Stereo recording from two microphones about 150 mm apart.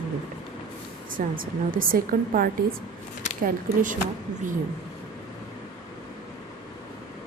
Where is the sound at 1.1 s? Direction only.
70° right (ahead or behind).